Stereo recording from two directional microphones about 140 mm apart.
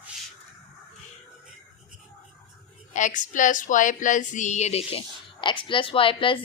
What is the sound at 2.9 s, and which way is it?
Speech, 65° left (ahead or behind).